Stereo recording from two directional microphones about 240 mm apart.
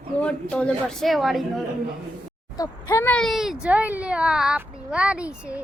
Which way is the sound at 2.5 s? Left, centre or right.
Centre.